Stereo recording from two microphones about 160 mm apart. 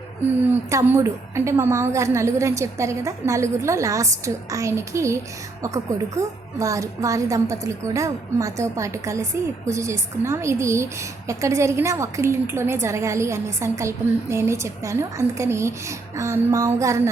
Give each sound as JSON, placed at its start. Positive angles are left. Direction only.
{"t": 0.3, "sound": "a woman's voice", "side_deg": -10}